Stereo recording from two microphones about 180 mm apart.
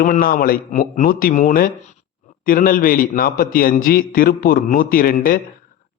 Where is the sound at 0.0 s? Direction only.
50° left (ahead or behind).